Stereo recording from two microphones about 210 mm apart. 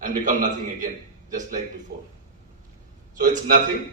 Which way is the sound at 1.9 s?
50° right (ahead or behind).